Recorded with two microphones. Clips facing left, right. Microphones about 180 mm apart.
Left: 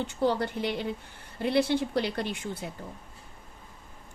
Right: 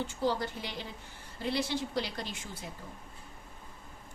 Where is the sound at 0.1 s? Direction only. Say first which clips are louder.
Left 5 dB; 65° left (ahead or behind).